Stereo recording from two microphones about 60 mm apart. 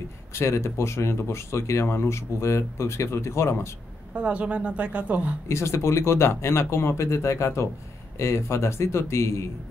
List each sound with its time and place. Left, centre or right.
0.3 s speech: left
4.1 s a woman's voice: right
5.5 s speech: left